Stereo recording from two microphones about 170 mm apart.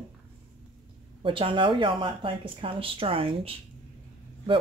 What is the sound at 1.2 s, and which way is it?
Speech, 30° right (ahead or behind).